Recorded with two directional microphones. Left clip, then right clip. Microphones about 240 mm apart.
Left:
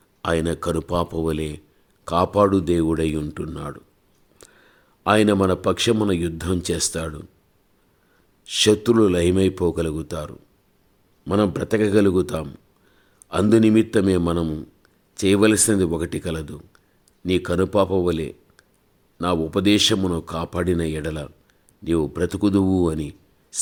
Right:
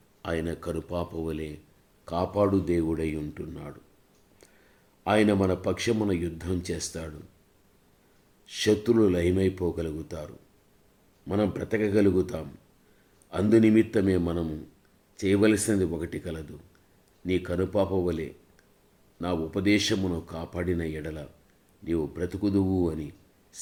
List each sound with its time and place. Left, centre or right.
0.2 s speech: left
4.4 s a sound: left
5.0 s speech: left
8.4 s a man's voice: left